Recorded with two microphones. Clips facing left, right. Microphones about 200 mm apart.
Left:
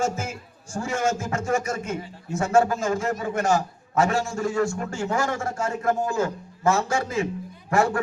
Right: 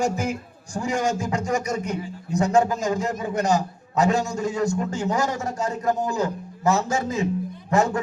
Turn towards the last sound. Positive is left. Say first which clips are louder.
# right 1 dB
turn(degrees=-20)  # may be behind; listen again after turning